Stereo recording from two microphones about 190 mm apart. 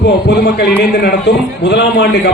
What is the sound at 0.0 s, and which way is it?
A man's voice, 60° left (ahead or behind).